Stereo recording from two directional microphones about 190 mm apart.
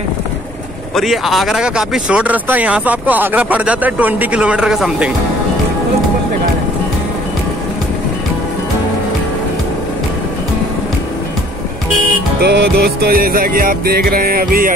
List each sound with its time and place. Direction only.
0.9 s speech: centre (ahead or behind)
12.4 s music: 60° right (ahead or behind)